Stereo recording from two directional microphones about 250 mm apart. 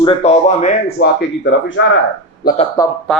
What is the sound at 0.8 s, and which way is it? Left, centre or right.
Speech, left.